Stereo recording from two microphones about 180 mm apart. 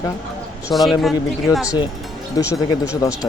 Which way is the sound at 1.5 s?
20° left (ahead or behind).